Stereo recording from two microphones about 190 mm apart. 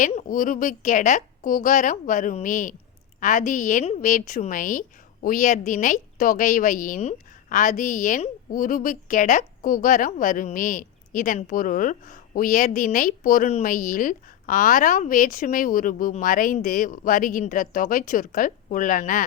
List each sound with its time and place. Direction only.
0.0 s a woman's voice: 40° left (ahead or behind)